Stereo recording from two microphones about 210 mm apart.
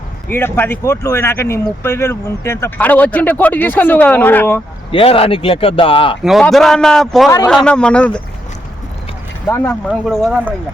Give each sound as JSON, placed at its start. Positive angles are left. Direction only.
{"t": 0.3, "sound": "speech", "side_deg": 10}
{"t": 4.9, "sound": "a man's voice", "side_deg": 25}
{"t": 6.2, "sound": "a man's voice", "side_deg": 0}
{"t": 9.5, "sound": "speech", "side_deg": 10}
{"t": 9.9, "sound": "a man's voice", "side_deg": 0}